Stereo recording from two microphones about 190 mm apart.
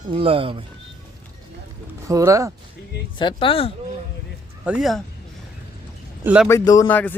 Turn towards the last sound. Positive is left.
turn(degrees=10)  # may be behind; listen again after turning